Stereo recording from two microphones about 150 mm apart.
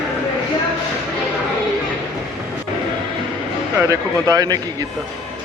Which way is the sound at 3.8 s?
20° right (ahead or behind).